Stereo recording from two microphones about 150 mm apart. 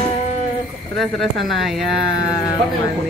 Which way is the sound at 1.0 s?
Centre (ahead or behind).